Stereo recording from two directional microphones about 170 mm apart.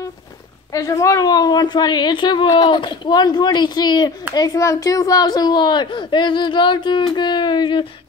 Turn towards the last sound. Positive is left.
turn(degrees=30)  # may be behind; listen again after turning